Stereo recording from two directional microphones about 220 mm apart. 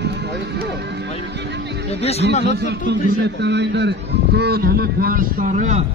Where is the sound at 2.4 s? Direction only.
50° right (ahead or behind); by 5.8 s 35° right (ahead or behind).